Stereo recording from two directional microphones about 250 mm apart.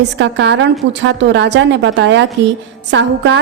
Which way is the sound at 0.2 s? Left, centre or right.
Right.